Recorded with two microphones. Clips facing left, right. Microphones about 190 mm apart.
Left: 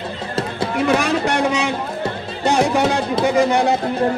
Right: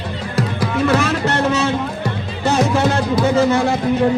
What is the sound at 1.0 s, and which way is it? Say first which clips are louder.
Speech: even; 15° left (ahead or behind).